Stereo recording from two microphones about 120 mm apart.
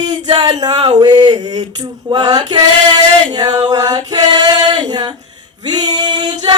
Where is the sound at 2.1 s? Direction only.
35° right (ahead or behind).